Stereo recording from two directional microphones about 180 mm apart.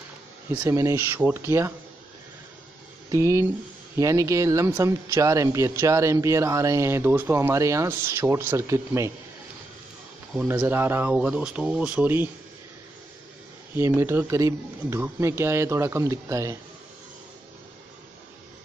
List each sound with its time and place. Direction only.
0.5 s speech: 15° right (ahead or behind)
3.1 s speech: 15° right (ahead or behind)
10.3 s speech: 5° right (ahead or behind)
13.7 s speech: 15° right (ahead or behind)